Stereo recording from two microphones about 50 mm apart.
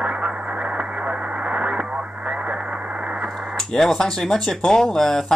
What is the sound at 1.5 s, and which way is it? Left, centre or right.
Radio, right.